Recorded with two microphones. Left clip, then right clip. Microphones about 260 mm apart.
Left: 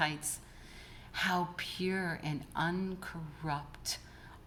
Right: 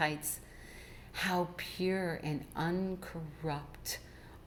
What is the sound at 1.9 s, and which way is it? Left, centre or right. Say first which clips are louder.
Speech: right 2 dB; left.